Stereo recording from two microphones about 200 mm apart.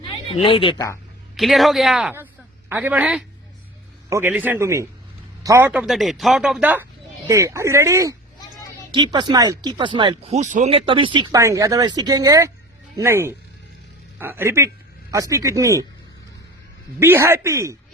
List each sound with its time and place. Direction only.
0.3 s speech: 25° left (ahead or behind)
1.4 s speech: centre (ahead or behind); by 15.9 s 15° right (ahead or behind)
17.0 s speech: 10° right (ahead or behind)